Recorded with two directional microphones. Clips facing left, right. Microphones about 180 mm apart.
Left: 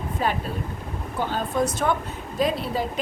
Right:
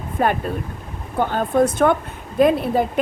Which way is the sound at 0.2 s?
55° right (ahead or behind).